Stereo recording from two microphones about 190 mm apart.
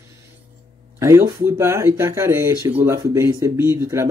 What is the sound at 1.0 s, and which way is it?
Speech, 15° right (ahead or behind).